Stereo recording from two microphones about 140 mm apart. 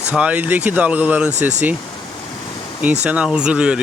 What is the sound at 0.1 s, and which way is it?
Speech, 10° right (ahead or behind).